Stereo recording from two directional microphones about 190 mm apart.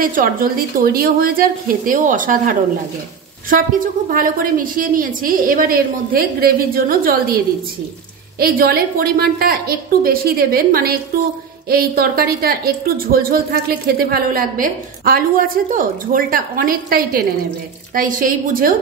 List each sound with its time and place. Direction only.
0.0 s a woman's voice: 50° right (ahead or behind)
8.4 s a woman's voice: 50° right (ahead or behind)